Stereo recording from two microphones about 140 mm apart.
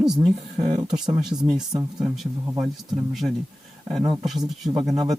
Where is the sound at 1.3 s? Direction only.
30° right (ahead or behind).